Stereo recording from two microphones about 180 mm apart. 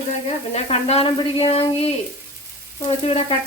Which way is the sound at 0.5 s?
35° left (ahead or behind).